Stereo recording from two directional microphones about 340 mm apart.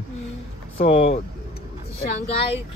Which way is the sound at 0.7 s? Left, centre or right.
Centre.